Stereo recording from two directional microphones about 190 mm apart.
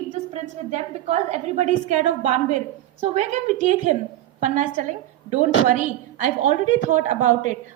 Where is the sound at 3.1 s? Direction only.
40° right (ahead or behind).